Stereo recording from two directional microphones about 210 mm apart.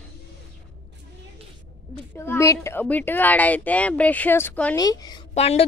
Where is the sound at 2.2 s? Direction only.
15° left (ahead or behind).